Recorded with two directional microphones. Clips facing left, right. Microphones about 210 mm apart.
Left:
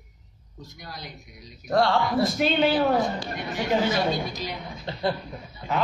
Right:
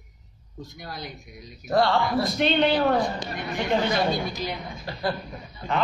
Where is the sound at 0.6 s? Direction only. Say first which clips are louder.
Right 4 dB; 50° right (ahead or behind).